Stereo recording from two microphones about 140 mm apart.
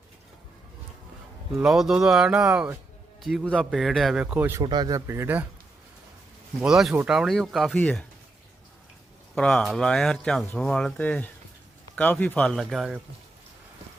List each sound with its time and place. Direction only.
1.6 s speech: 5° right (ahead or behind)
3.4 s speech: 10° left (ahead or behind); by 4.6 s 15° right (ahead or behind)
4.6 s speech: 30° right (ahead or behind); by 5.5 s 15° right (ahead or behind)
6.7 s speech: centre (ahead or behind)
9.3 s speech: 5° left (ahead or behind)